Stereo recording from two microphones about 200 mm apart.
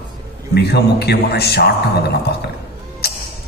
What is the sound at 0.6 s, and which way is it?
A man's voice, 55° left (ahead or behind).